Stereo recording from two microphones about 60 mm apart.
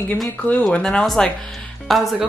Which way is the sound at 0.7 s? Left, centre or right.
Centre.